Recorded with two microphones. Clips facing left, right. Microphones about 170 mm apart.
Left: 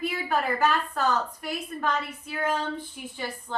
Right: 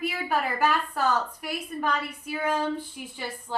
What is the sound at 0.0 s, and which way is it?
A woman's voice, 10° right (ahead or behind).